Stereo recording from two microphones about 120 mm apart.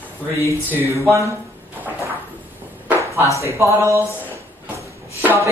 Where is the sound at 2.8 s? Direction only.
25° right (ahead or behind).